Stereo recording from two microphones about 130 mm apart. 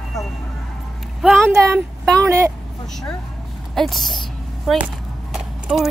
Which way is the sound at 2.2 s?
20° right (ahead or behind).